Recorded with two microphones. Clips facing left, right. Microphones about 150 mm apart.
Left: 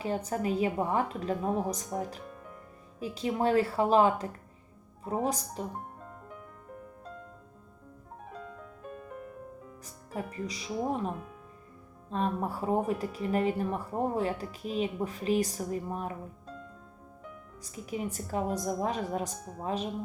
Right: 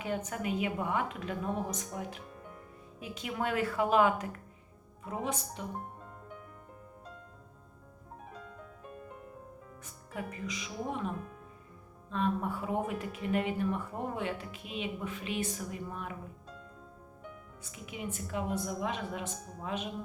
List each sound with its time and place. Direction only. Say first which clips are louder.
0.0 s speech: left 4 dB; 35° left (ahead or behind)
8.2 s music: left 5 dB; centre (ahead or behind)
9.8 s speech: left 3 dB; 35° left (ahead or behind)
12.1 s speech: left 1 dB; 35° left (ahead or behind)
17.6 s speech: left 7 dB; 35° left (ahead or behind)